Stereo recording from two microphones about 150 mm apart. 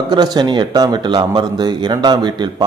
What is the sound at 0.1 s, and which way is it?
Speech, 30° right (ahead or behind).